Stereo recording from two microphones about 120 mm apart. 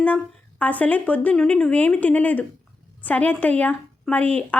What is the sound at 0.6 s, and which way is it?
A woman's voice, 15° left (ahead or behind).